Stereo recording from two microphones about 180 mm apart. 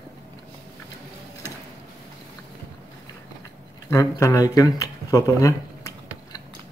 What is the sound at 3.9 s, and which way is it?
Speech, 20° left (ahead or behind).